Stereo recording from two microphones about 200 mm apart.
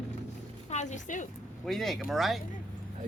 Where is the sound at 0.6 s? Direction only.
35° left (ahead or behind).